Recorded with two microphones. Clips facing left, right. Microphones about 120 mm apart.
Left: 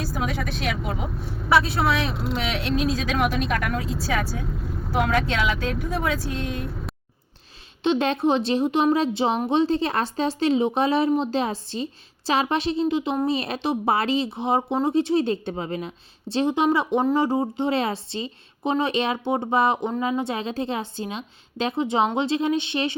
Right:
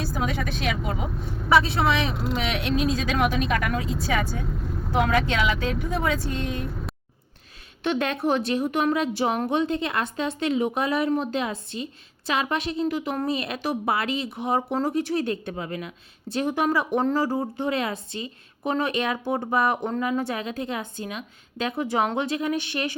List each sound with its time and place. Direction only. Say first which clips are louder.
0.0 s speech: even; centre (ahead or behind)
7.9 s a woman's voice: left 3 dB; 25° left (ahead or behind)